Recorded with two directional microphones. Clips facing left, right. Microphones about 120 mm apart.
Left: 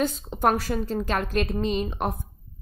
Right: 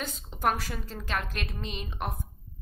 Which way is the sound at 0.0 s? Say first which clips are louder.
Left 6 dB; 40° left (ahead or behind).